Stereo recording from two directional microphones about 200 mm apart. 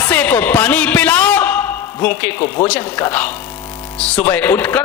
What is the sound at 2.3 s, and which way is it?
A man's voice, 20° left (ahead or behind).